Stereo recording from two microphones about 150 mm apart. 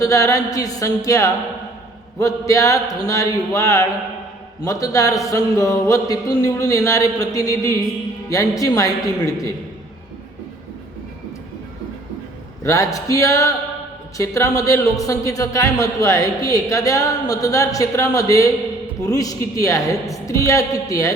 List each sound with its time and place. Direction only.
0.0 s speech: 20° left (ahead or behind)
12.6 s speech: 20° left (ahead or behind)